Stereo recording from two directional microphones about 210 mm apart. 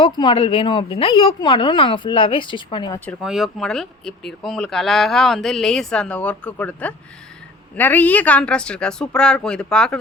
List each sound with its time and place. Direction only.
0.0 s a woman's voice: 25° left (ahead or behind)
3.1 s speech: centre (ahead or behind)